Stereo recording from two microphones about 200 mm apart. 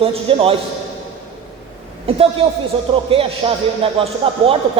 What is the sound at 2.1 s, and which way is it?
A man's voice, 30° right (ahead or behind).